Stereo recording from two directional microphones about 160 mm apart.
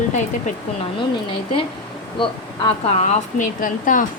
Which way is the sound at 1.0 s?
30° left (ahead or behind).